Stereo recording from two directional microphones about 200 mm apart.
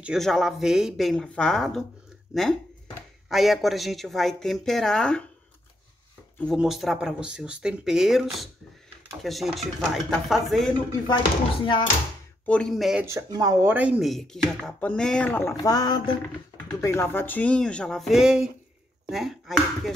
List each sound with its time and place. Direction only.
0.0 s chopping: centre (ahead or behind)
2.3 s speech: centre (ahead or behind)
3.3 s chopping: centre (ahead or behind)
6.4 s chopping: centre (ahead or behind)
11.1 s speech: 25° left (ahead or behind)
12.4 s chopping: 5° left (ahead or behind)
13.0 s chopping: 15° right (ahead or behind); by 19.9 s centre (ahead or behind)